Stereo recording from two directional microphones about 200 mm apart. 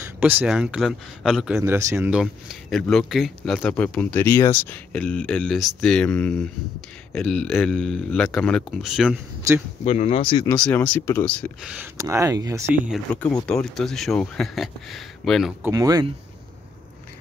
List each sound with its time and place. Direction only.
0.2 s speech: 10° right (ahead or behind)
1.6 s speech: 15° right (ahead or behind)
9.8 s speech: 35° left (ahead or behind)
10.5 s speech: 5° left (ahead or behind)
11.6 s speech: 5° right (ahead or behind)
15.6 s speech: 15° right (ahead or behind)